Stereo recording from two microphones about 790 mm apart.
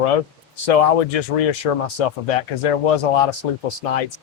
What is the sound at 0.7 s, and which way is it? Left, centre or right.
Speech, left.